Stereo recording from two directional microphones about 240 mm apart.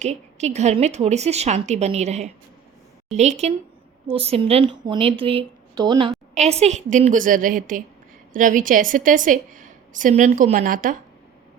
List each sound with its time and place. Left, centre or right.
0.0 s a woman's voice: right